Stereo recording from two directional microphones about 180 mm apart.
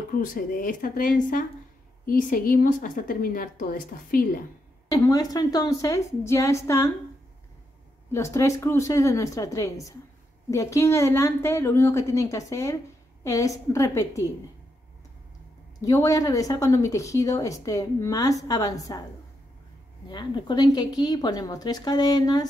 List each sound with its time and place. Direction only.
0.1 s a woman's voice: 50° left (ahead or behind)
4.8 s speech: 20° left (ahead or behind)
8.1 s a woman's voice: 15° left (ahead or behind)
15.8 s speech: 20° left (ahead or behind)
20.1 s speech: 25° left (ahead or behind)